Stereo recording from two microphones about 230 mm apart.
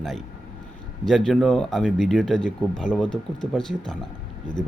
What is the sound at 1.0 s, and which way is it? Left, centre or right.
Speech, centre.